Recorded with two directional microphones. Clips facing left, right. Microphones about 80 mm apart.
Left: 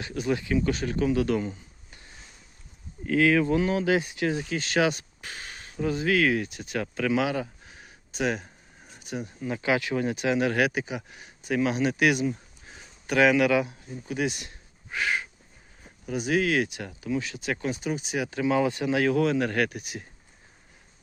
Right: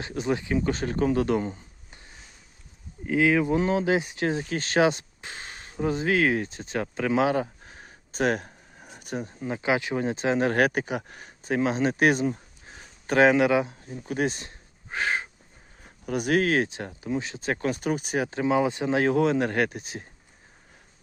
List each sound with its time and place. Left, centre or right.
0.0 s speech: right
3.1 s speech: centre
3.6 s speech: right
7.1 s a sound: right
9.5 s speech: right
14.0 s a sound: right
16.0 s speech: right
17.6 s speech: right